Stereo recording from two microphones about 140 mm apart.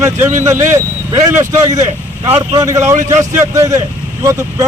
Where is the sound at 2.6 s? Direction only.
20° right (ahead or behind).